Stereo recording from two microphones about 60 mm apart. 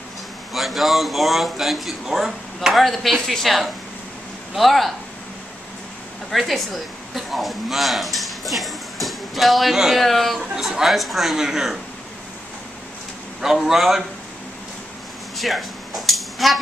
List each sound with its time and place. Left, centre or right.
0.5 s a man's voice: centre
6.3 s a man's voice: centre
10.5 s a man's voice: centre
13.4 s a man's voice: centre
15.3 s cutlery: centre